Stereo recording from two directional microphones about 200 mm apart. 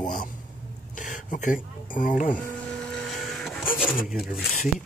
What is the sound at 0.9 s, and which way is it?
Speech, 40° left (ahead or behind).